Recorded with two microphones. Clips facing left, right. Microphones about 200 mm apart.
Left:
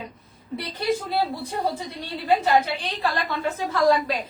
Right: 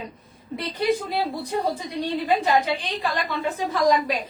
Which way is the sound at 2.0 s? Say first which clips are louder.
Left 1 dB; 15° right (ahead or behind).